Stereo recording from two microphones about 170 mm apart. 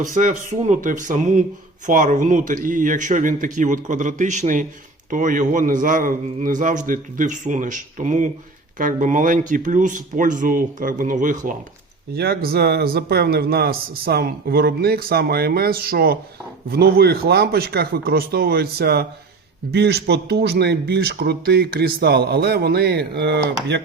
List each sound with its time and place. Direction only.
0.0 s a man's voice: 50° right (ahead or behind)
12.1 s speech: 65° right (ahead or behind); by 23.8 s 90° right